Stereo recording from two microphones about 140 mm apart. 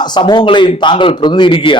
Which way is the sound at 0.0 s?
30° left (ahead or behind).